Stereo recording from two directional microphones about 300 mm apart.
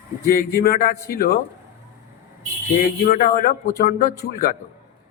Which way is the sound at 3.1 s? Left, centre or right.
Left.